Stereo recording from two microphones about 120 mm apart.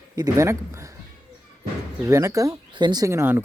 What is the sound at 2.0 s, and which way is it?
Speech, 25° right (ahead or behind).